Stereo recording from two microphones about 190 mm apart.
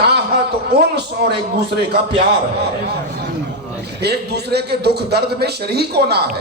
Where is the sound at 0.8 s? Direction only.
60° right (ahead or behind).